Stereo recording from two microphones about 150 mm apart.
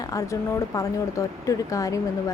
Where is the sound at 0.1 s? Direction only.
20° left (ahead or behind).